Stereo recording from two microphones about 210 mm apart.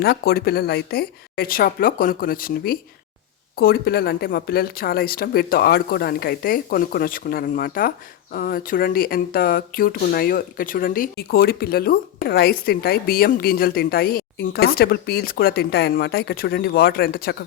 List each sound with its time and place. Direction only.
0.0 s a woman's voice: 50° left (ahead or behind)